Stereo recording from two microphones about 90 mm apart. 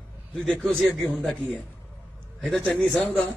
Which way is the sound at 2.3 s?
5° left (ahead or behind).